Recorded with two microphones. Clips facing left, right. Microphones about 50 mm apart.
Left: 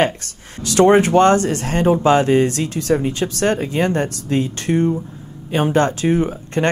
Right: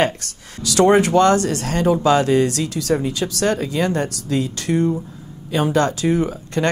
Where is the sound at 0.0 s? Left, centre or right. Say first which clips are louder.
Left 1 dB; left.